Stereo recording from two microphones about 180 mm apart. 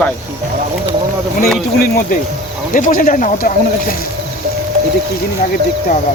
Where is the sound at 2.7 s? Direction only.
50° left (ahead or behind).